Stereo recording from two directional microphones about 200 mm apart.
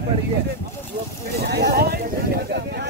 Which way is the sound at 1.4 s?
55° right (ahead or behind).